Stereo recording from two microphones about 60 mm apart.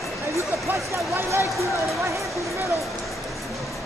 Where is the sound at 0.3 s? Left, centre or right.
Right.